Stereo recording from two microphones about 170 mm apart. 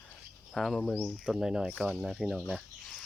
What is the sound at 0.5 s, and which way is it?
Speech, centre (ahead or behind).